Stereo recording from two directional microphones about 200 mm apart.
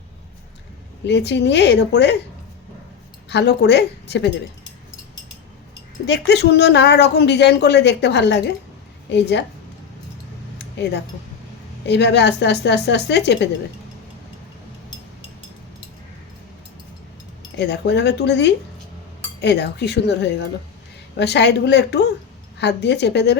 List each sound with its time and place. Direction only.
1.0 s speech: 60° left (ahead or behind)
3.2 s speech: 60° left (ahead or behind)
6.1 s speech: 60° left (ahead or behind)
10.6 s a sound: 60° left (ahead or behind)
11.9 s speech: 60° left (ahead or behind)
17.6 s speech: 60° left (ahead or behind)